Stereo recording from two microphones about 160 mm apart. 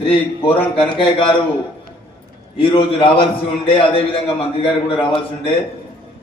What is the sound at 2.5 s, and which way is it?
A man's voice, 35° left (ahead or behind).